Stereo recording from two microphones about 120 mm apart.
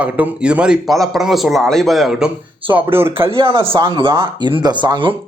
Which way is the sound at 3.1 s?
50° right (ahead or behind).